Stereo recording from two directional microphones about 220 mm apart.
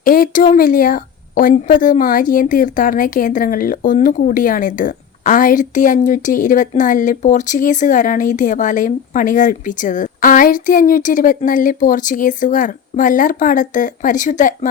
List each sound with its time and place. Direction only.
0.0 s a woman's voice: 40° left (ahead or behind)